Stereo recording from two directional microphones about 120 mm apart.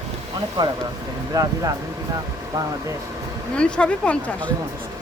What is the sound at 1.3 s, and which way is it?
Speech, 30° right (ahead or behind).